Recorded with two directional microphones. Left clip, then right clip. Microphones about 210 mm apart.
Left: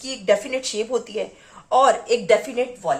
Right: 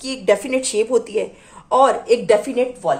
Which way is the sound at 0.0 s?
45° right (ahead or behind).